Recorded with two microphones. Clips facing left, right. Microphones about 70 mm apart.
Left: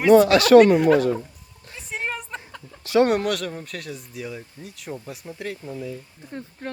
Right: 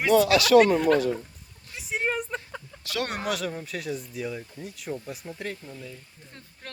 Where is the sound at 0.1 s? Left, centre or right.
Left.